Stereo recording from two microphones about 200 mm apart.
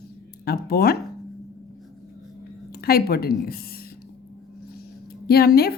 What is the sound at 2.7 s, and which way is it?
A woman's voice, 50° left (ahead or behind).